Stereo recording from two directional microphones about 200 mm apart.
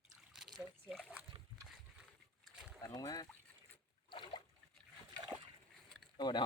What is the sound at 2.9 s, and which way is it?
Speech, 20° left (ahead or behind).